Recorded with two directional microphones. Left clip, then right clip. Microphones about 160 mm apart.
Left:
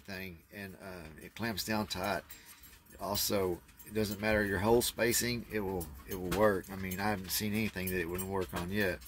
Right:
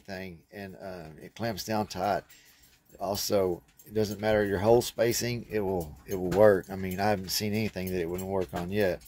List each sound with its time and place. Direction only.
0.0 s speech: 25° right (ahead or behind)
6.4 s speech: 40° right (ahead or behind)